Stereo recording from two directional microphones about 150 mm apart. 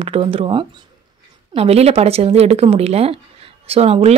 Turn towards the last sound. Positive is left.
turn(degrees=-45)  # may be behind; listen again after turning